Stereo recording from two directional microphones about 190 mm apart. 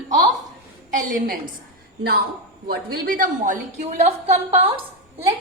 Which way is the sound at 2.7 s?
50° right (ahead or behind).